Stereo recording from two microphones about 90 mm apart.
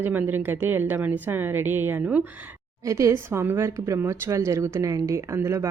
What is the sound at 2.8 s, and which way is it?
A woman's voice, 35° right (ahead or behind).